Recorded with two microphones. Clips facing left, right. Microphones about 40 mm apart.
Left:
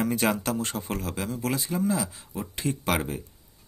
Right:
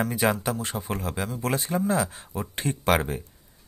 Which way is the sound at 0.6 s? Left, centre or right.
Centre.